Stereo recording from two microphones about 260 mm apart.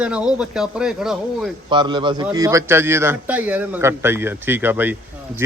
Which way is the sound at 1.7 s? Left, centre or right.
Centre.